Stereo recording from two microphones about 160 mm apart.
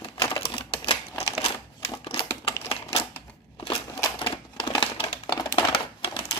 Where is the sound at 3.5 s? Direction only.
30° left (ahead or behind).